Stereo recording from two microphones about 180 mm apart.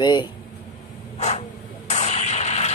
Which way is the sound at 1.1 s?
35° left (ahead or behind).